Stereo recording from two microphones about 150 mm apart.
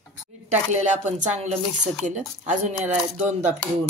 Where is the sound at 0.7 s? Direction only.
50° right (ahead or behind).